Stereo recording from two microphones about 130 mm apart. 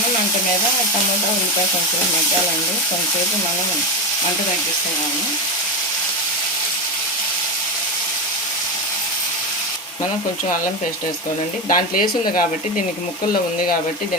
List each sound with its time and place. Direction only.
11.7 s speech: 90° left